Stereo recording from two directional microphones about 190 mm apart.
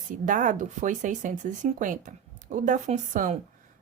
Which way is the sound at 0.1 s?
45° right (ahead or behind).